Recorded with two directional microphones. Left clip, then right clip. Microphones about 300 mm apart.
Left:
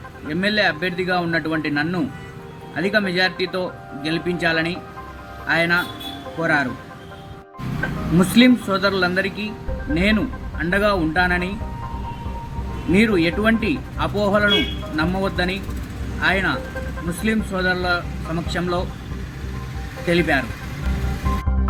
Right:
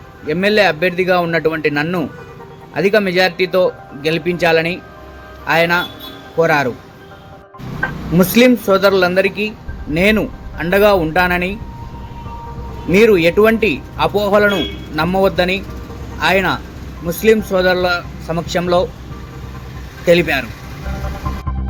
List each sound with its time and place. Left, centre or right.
0.3 s a man's voice: centre
8.4 s speech: centre
12.9 s speech: centre
20.1 s speech: centre